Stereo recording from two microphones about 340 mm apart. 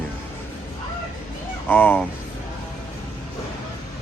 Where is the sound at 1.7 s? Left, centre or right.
Centre.